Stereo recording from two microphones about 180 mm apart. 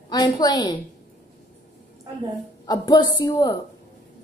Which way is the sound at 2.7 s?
25° left (ahead or behind).